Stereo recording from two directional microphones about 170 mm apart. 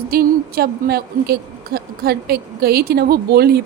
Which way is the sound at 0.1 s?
60° right (ahead or behind).